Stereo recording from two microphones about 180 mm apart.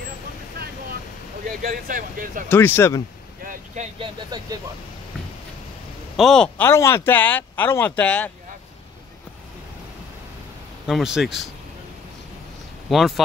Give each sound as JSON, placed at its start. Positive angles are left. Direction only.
{"t": 1.6, "sound": "speech", "side_deg": -55}
{"t": 2.5, "sound": "speech", "side_deg": 10}
{"t": 3.4, "sound": "vehicle", "side_deg": -40}
{"t": 4.0, "sound": "speech", "side_deg": -20}
{"t": 6.1, "sound": "speech", "side_deg": 5}
{"t": 10.9, "sound": "speech", "side_deg": -5}
{"t": 12.9, "sound": "speech", "side_deg": 0}